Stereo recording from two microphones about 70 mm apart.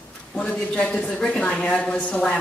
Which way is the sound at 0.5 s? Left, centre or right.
Centre.